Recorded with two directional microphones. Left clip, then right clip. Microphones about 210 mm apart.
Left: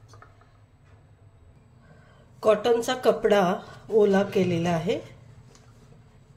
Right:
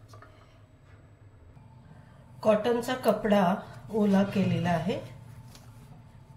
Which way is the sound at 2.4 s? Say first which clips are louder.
Left 4 dB; 55° left (ahead or behind).